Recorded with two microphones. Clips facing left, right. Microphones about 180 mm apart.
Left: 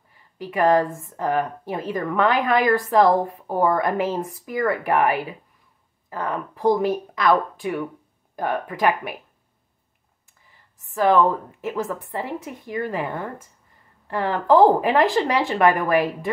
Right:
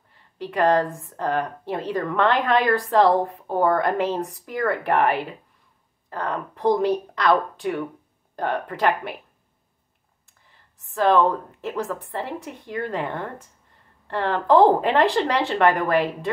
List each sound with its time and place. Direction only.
0.1 s speech: 10° left (ahead or behind)
11.0 s speech: 10° left (ahead or behind)